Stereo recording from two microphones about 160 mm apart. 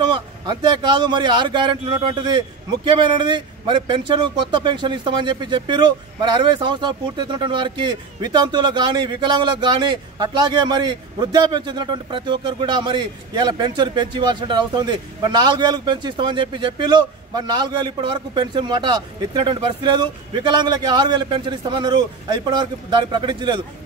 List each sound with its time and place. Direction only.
0.0 s speech: 30° right (ahead or behind)